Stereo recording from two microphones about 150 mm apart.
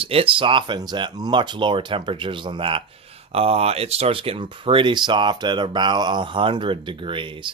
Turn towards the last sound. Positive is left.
turn(degrees=-35)  # may be behind; listen again after turning